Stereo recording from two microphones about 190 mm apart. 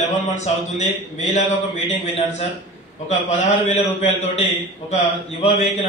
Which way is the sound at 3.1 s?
40° left (ahead or behind).